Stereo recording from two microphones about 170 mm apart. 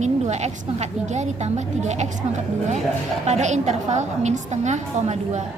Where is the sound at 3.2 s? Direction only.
40° right (ahead or behind).